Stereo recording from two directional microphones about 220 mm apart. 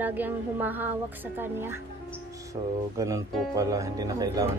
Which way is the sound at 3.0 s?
15° right (ahead or behind).